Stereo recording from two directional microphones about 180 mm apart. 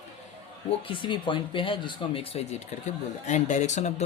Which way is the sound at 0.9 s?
25° left (ahead or behind).